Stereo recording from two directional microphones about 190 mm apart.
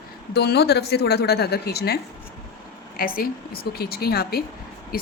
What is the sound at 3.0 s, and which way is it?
A woman's voice, 50° left (ahead or behind).